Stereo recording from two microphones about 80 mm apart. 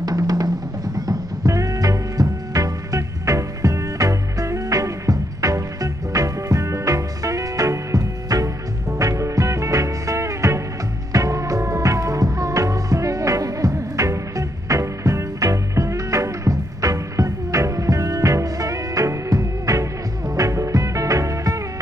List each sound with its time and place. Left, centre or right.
0.0 s music: right